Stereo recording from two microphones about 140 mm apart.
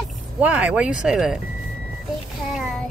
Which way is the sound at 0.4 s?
10° right (ahead or behind).